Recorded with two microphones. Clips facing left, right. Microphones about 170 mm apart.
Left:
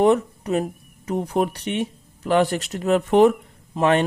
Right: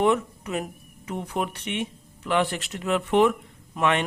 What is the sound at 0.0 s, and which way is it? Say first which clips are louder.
Speech: left 5 dB; 40° left (ahead or behind).